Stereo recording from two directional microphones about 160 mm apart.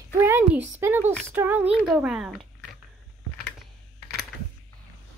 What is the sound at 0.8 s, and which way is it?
A child's voice, 15° right (ahead or behind).